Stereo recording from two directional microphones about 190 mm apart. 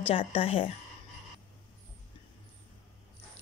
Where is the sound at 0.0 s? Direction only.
30° left (ahead or behind).